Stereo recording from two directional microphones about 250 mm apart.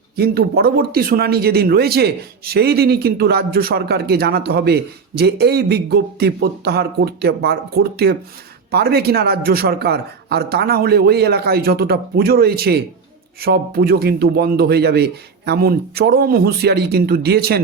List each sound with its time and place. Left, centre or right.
0.2 s speech: right